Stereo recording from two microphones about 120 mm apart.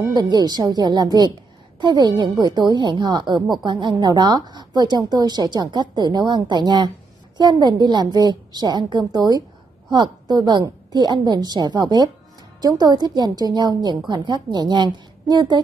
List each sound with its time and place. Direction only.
0.0 s speech: 35° right (ahead or behind)